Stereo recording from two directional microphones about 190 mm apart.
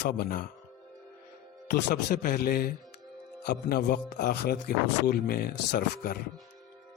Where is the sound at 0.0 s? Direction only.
55° left (ahead or behind).